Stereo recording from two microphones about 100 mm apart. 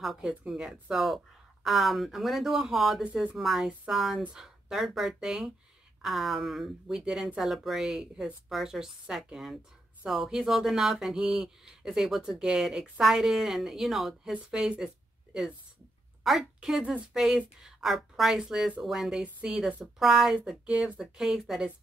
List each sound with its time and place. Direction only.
0.0 s speech: centre (ahead or behind)
3.1 s a woman's voice: 15° right (ahead or behind)
3.3 s a woman's voice: centre (ahead or behind)
16.3 s a woman's voice: 5° right (ahead or behind)